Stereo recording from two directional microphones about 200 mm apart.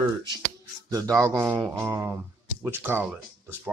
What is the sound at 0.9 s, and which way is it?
Speech, 15° right (ahead or behind).